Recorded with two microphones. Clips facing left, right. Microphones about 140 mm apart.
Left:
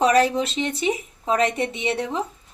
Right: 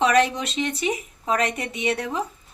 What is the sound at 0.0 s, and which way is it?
Speech, 35° left (ahead or behind).